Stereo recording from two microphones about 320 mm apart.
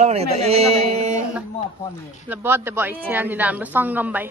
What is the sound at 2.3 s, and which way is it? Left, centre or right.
A woman's voice, centre.